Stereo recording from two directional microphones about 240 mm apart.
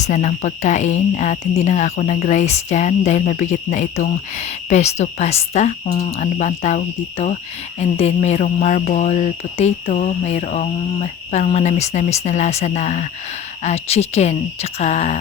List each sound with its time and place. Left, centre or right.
0.0 s speech: left